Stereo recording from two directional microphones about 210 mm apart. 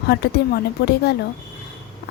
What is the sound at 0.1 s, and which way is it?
A woman's voice, 50° left (ahead or behind).